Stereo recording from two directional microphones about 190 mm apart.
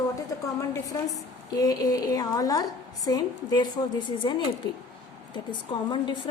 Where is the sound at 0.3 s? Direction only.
15° left (ahead or behind).